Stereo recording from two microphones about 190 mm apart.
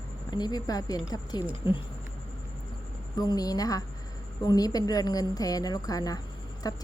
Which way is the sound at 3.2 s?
20° left (ahead or behind).